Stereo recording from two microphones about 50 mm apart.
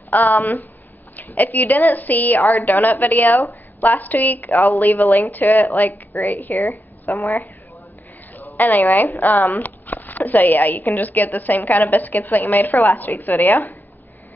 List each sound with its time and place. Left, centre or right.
0.1 s speech: left
6.6 s a woman's voice: left
7.2 s speech: left